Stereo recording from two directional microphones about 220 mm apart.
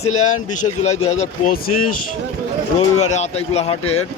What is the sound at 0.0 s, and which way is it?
Speech, 75° left (ahead or behind).